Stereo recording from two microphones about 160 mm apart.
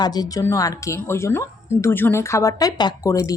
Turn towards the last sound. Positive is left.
turn(degrees=20)  # may be behind; listen again after turning